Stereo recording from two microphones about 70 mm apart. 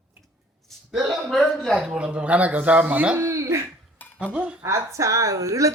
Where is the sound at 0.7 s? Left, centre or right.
Centre.